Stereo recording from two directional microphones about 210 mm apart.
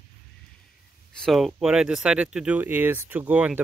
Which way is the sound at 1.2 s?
Centre (ahead or behind).